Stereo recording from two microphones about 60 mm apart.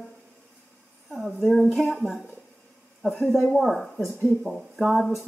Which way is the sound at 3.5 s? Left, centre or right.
Centre.